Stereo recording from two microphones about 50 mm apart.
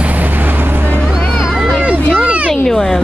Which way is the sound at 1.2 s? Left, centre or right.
Centre.